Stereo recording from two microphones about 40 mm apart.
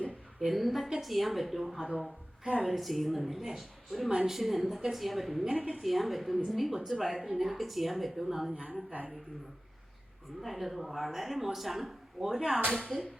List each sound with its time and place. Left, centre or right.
0.3 s a woman's voice: centre
2.0 s a woman's voice: right
2.6 s speech: centre
5.5 s a woman's voice: right
5.8 s speech: centre
8.5 s a woman's voice: right
10.5 s speech: centre
12.2 s speech: centre